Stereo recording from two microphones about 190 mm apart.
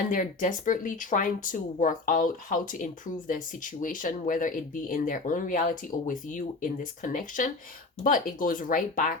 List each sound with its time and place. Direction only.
0.1 s speech: 45° left (ahead or behind)